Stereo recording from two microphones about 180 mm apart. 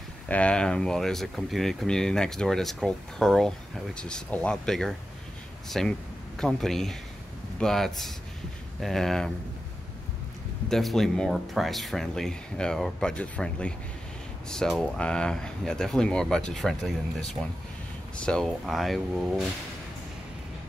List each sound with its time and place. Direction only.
0.3 s speech: 5° left (ahead or behind)
10.7 s speech: centre (ahead or behind)